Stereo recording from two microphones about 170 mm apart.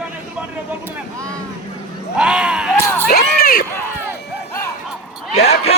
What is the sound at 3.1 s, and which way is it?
Speech, 60° left (ahead or behind).